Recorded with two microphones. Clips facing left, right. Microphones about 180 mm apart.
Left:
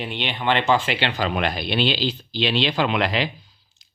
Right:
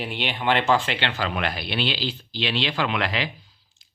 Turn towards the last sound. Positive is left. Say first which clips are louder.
# left 4 dB
turn(degrees=20)  # may be behind; listen again after turning